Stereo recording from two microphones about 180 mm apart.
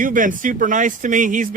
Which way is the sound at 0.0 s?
50° right (ahead or behind).